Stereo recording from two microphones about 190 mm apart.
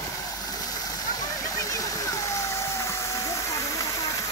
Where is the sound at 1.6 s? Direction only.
15° left (ahead or behind).